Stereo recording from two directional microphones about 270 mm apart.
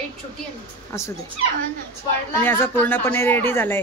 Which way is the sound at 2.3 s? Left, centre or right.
Centre.